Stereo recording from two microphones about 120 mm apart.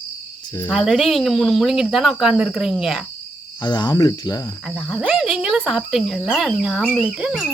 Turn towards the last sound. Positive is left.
turn(degrees=-5)  # may be behind; listen again after turning